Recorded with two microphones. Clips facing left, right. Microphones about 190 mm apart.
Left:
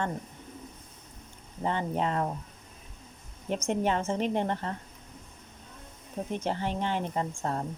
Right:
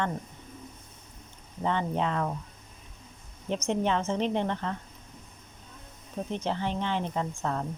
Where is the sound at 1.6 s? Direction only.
45° left (ahead or behind).